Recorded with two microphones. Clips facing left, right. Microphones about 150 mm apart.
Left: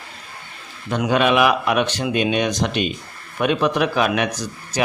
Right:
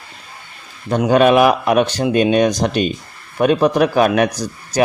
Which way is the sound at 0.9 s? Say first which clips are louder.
Right 6 dB; 40° right (ahead or behind).